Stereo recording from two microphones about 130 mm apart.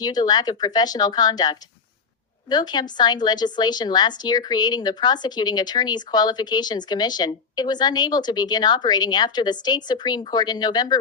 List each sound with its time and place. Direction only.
0.0 s speech: 30° left (ahead or behind)